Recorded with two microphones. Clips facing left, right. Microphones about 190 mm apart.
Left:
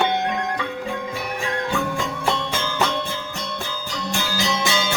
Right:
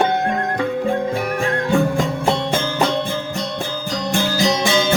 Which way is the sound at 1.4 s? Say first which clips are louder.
Right 6 dB; 50° right (ahead or behind).